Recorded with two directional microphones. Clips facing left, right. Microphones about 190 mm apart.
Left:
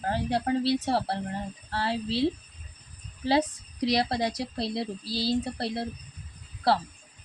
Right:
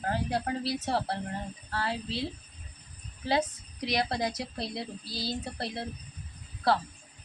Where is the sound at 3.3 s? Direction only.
30° left (ahead or behind).